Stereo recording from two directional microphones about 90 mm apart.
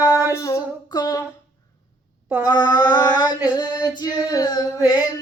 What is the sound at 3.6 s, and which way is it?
Female singing, 50° left (ahead or behind).